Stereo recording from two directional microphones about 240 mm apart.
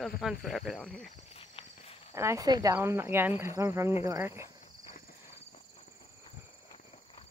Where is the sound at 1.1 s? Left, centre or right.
Left.